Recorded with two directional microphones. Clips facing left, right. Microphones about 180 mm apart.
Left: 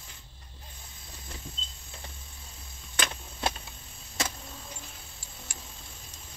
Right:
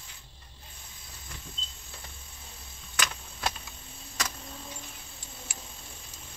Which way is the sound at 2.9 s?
30° left (ahead or behind).